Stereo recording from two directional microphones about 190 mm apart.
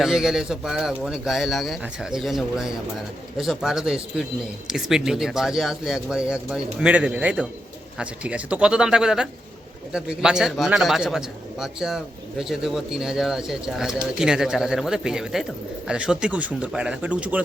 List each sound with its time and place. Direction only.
0.0 s speech: centre (ahead or behind)